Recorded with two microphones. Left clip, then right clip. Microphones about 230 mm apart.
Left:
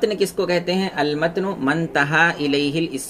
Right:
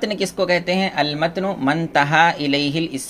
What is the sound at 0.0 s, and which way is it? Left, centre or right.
Speech, right.